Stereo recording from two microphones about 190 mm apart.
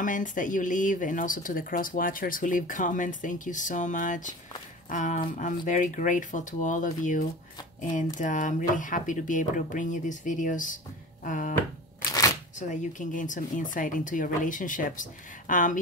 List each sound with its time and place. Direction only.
0.0 s speech: 45° left (ahead or behind)
12.5 s speech: 40° left (ahead or behind)